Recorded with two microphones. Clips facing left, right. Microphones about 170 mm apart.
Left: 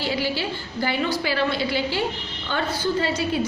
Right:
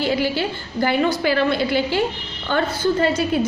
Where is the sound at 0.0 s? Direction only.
50° right (ahead or behind).